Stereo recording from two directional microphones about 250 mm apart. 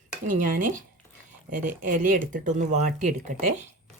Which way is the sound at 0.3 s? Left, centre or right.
Right.